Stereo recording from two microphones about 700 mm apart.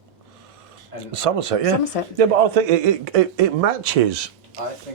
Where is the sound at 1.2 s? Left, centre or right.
Right.